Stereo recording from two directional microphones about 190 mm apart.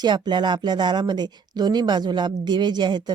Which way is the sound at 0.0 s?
25° right (ahead or behind).